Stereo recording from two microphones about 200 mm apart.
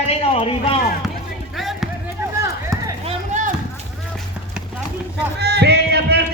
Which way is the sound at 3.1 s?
35° right (ahead or behind).